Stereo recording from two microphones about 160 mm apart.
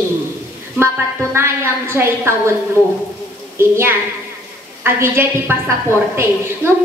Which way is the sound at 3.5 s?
15° right (ahead or behind).